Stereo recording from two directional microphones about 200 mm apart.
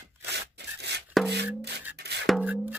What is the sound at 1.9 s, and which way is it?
Music, 55° right (ahead or behind).